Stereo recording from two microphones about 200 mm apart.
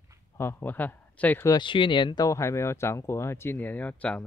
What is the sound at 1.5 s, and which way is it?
Speech, 25° left (ahead or behind).